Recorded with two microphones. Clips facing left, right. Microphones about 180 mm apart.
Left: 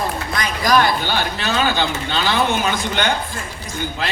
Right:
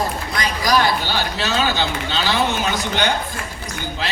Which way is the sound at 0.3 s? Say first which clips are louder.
Left 2 dB; 50° left (ahead or behind).